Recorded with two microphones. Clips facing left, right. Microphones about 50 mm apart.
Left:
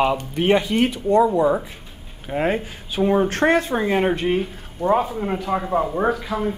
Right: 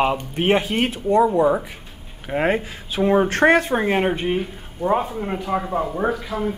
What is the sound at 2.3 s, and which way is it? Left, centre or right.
Speech, right.